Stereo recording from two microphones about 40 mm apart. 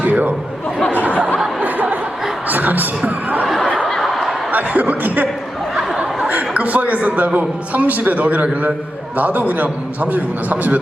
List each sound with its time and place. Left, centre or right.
0.0 s chatter: right
0.9 s a sound: right
3.8 s snicker: centre
4.5 s speech: right
6.2 s chuckle: right
7.3 s a man's voice: right